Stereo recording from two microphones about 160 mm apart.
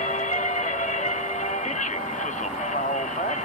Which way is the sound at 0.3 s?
50° left (ahead or behind).